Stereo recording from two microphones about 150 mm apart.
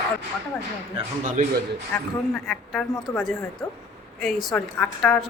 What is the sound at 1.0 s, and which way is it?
Speech, 40° right (ahead or behind).